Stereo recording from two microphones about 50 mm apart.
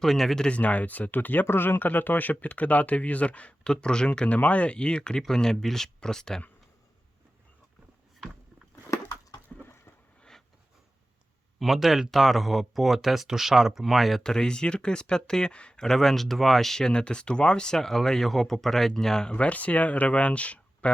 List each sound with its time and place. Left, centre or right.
0.0 s speech: centre
0.4 s speech: left
1.5 s speech: left; by 4.3 s centre
4.3 s speech: left; by 6.4 s centre
9.5 s a sound: centre
11.6 s speech: centre
14.3 s speech: centre
15.8 s speech: centre
19.3 s speech: left